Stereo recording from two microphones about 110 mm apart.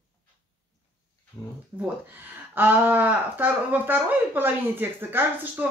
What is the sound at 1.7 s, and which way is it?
A woman's voice, 15° right (ahead or behind).